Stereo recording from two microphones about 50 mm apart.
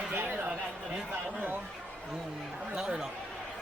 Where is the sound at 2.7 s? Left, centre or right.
Centre.